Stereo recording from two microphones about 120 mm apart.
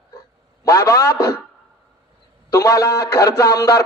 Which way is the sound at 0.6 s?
25° left (ahead or behind).